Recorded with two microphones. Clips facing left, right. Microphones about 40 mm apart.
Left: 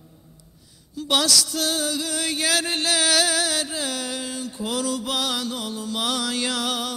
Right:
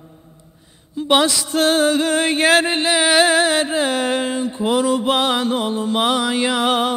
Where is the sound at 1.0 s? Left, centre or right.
Right.